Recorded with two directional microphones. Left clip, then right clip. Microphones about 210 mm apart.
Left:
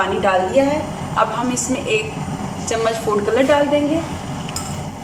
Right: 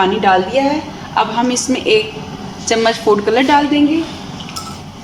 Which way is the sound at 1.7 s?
45° right (ahead or behind).